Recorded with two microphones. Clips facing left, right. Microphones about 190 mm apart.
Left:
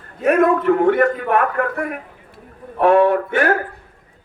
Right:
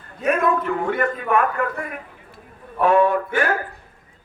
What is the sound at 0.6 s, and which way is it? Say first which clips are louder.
Speech: left 8 dB; 65° left (ahead or behind).